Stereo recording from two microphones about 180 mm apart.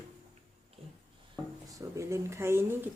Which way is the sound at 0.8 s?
30° right (ahead or behind).